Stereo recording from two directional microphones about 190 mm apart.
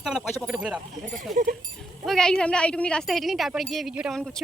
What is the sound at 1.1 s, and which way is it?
Speech, 45° right (ahead or behind).